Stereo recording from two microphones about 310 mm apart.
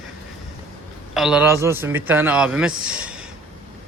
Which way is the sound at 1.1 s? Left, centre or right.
Centre.